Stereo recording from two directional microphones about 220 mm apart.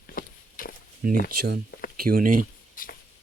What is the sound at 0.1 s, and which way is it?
Walk, 40° left (ahead or behind).